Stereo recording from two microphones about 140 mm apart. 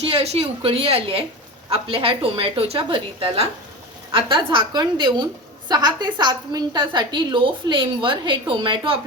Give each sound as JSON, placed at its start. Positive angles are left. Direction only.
{"t": 0.1, "sound": "a woman's voice", "side_deg": -45}